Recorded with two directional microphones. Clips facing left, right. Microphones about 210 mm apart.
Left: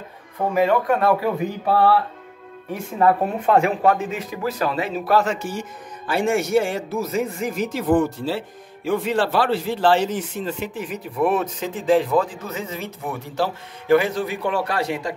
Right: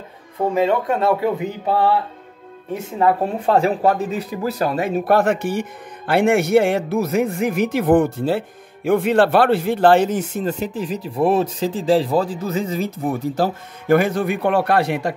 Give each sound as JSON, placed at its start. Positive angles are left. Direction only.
{"t": 0.6, "sound": "speech", "side_deg": -25}
{"t": 3.3, "sound": "speech", "side_deg": -35}